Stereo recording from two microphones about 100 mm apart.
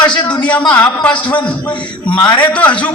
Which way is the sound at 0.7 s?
15° left (ahead or behind).